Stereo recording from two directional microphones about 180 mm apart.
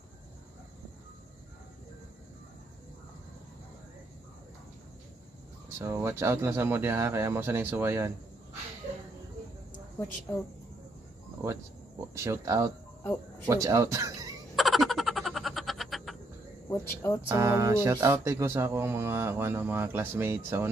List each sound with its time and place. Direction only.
5.8 s speech: 15° right (ahead or behind)
10.3 s speech: 10° left (ahead or behind)
12.1 s speech: 15° right (ahead or behind)
14.5 s a sound: centre (ahead or behind)
16.6 s speech: 15° left (ahead or behind)
17.3 s speech: 15° right (ahead or behind)